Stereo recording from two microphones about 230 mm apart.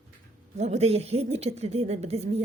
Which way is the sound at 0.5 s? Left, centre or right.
Right.